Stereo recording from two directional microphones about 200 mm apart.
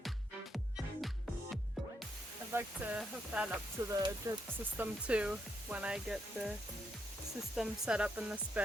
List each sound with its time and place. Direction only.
2.5 s speech: 10° right (ahead or behind)
3.8 s speech: 20° right (ahead or behind)
4.8 s speech: 5° right (ahead or behind)
7.5 s speech: 5° right (ahead or behind)